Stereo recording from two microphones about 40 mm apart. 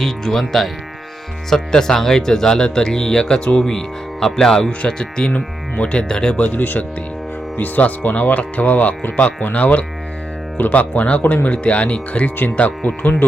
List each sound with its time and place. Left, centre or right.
0.0 s speech: centre
5.3 s speech: left
6.3 s speech: left
6.6 s speech: left